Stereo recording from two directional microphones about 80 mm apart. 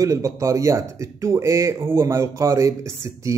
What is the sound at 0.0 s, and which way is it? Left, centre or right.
Speech, right.